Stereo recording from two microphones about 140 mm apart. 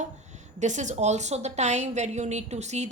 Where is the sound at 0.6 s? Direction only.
60° right (ahead or behind).